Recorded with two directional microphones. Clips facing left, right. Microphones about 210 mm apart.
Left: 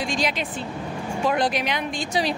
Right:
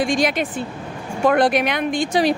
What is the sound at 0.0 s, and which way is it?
Speech, 50° right (ahead or behind).